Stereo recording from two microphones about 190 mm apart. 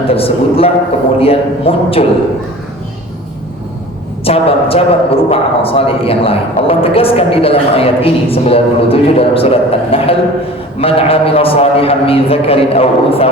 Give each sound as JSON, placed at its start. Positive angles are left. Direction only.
{"t": 0.1, "sound": "a man's voice", "side_deg": 30}
{"t": 4.2, "sound": "a man's voice", "side_deg": 30}